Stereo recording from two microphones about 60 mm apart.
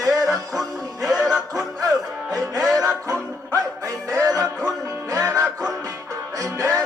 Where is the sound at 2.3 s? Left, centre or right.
Right.